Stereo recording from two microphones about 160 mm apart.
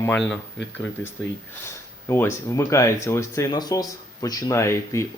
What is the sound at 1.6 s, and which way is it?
Speech, 15° left (ahead or behind).